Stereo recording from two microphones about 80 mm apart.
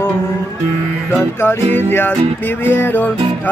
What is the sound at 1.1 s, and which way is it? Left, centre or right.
Speech, left.